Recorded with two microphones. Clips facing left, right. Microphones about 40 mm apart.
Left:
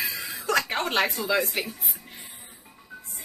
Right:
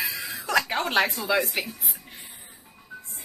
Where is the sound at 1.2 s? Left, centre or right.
Centre.